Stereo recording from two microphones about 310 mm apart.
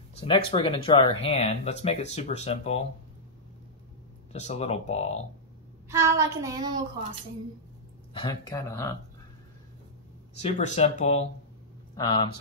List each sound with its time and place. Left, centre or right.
0.2 s speech: centre
4.3 s speech: left
5.9 s a woman's voice: centre
8.1 s speech: centre
10.4 s speech: left